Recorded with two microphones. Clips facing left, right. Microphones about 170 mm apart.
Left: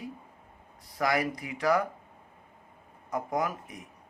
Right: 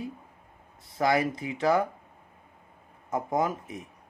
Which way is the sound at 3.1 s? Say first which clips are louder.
Right 3 dB; 25° right (ahead or behind).